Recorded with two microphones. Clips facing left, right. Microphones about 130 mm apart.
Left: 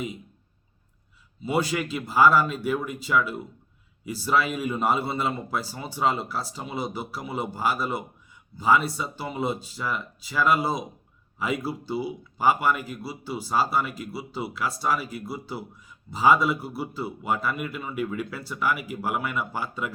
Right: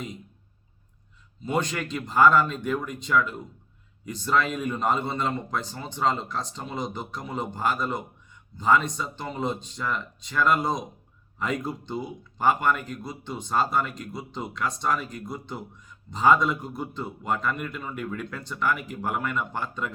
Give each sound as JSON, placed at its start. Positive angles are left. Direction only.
{"t": 1.4, "sound": "speech", "side_deg": 5}